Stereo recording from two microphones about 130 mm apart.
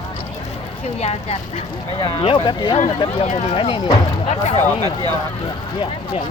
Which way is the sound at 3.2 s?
55° left (ahead or behind).